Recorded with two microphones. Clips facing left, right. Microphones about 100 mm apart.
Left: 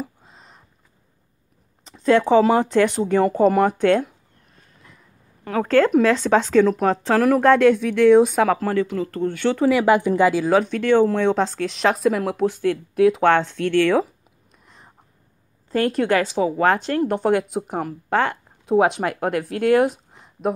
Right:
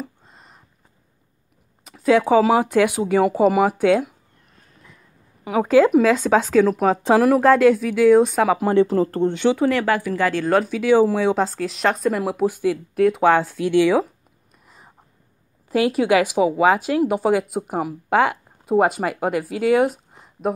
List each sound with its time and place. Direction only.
0.0 s a sound: centre (ahead or behind)
1.9 s speech: 5° right (ahead or behind)
5.4 s speech: 10° right (ahead or behind)
7.0 s speech: 15° right (ahead or behind)
7.2 s speech: 5° right (ahead or behind)
8.5 s speech: 20° right (ahead or behind)
8.8 s speech: 35° right (ahead or behind)
9.6 s speech: 5° left (ahead or behind)
9.8 s a woman's voice: 20° left (ahead or behind)
10.4 s speech: centre (ahead or behind)
13.9 s a sound: centre (ahead or behind)
15.7 s speech: 5° right (ahead or behind)